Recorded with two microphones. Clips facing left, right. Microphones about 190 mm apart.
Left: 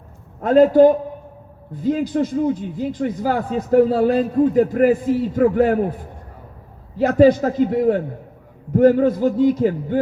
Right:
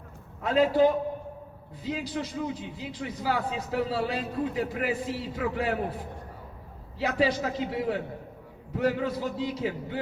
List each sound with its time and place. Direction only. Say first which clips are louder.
0.4 s a man's voice: left 10 dB; 50° left (ahead or behind)
6.9 s a man's voice: left 13 dB; 45° left (ahead or behind)